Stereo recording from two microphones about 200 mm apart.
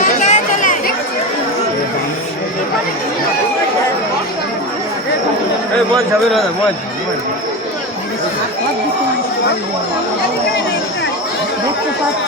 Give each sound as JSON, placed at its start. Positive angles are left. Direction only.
{"t": 0.0, "sound": "chatter", "side_deg": 40}